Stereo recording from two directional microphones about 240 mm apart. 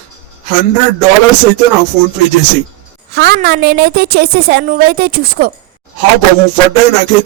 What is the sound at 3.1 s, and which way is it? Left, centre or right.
A woman's voice, right.